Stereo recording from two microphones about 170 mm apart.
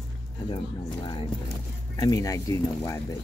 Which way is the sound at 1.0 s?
30° left (ahead or behind).